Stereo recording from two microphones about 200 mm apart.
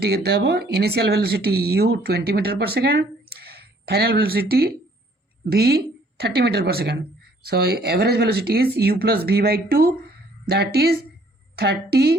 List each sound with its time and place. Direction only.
0.0 s a woman's voice: 50° right (ahead or behind)